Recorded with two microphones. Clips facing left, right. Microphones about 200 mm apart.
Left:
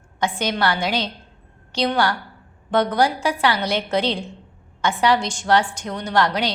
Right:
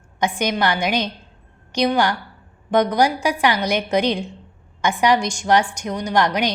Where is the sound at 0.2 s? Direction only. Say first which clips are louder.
Right 2 dB; 15° right (ahead or behind).